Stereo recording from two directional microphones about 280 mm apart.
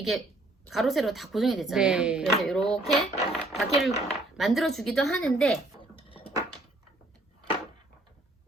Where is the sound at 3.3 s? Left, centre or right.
Centre.